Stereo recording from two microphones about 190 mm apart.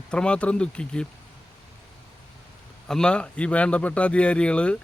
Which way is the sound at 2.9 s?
5° left (ahead or behind).